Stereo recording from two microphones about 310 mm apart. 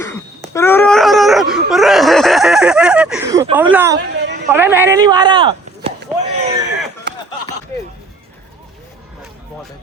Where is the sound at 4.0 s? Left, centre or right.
Right.